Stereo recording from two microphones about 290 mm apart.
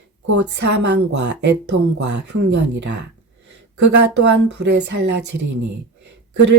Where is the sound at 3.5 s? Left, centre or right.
Right.